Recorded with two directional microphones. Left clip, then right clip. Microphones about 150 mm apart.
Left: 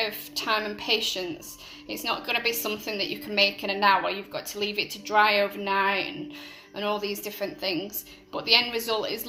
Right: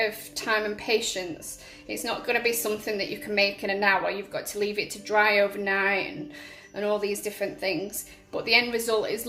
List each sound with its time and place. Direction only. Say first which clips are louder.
0.0 s a woman's voice: right 1 dB; 20° right (ahead or behind)